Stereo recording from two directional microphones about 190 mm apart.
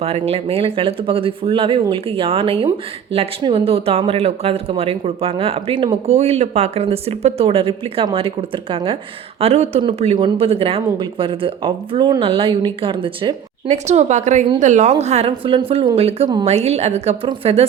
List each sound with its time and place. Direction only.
0.0 s speech: 30° right (ahead or behind)
13.7 s speech: 35° right (ahead or behind)